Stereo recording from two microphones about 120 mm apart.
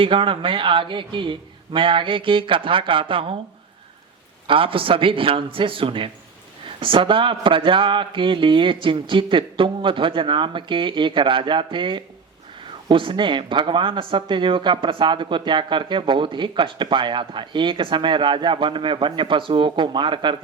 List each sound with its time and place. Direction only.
0.0 s speech: 45° right (ahead or behind)
4.4 s speech: 45° right (ahead or behind)